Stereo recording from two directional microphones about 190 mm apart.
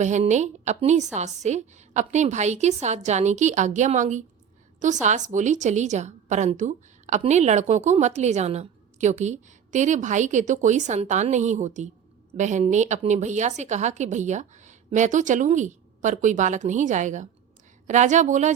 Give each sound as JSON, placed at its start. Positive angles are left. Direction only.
{"t": 0.0, "sound": "a woman's voice", "side_deg": -40}